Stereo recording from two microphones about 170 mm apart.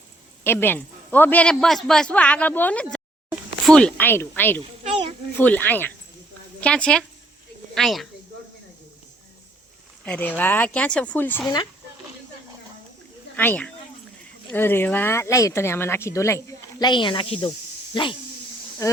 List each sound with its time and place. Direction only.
0.4 s a man's voice: 10° left (ahead or behind)
4.8 s children playing: 35° right (ahead or behind)
5.4 s a man's voice: 10° left (ahead or behind)
10.1 s a man's voice: 10° left (ahead or behind)
13.3 s a man's voice: 10° left (ahead or behind)
16.9 s speech: 30° left (ahead or behind)